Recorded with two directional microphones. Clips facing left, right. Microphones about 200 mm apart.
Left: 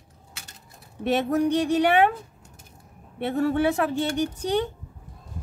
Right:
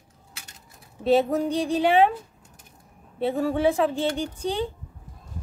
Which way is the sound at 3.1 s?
70° left (ahead or behind).